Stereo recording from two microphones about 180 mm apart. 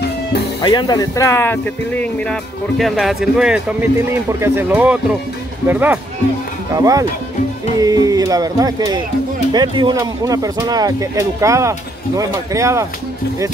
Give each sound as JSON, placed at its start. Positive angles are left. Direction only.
{"t": 0.6, "sound": "speech", "side_deg": 25}
{"t": 2.8, "sound": "speech", "side_deg": 0}